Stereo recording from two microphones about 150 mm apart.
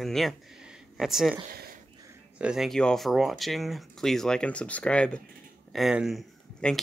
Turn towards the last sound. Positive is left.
turn(degrees=5)  # may be behind; listen again after turning